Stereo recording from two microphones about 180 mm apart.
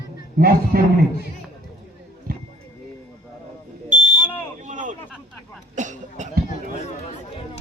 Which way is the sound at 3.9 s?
45° right (ahead or behind).